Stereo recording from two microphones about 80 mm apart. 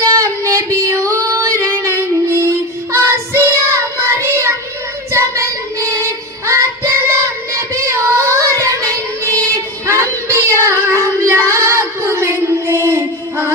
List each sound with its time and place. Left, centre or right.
0.0 s female singing: right
5.1 s child singing: right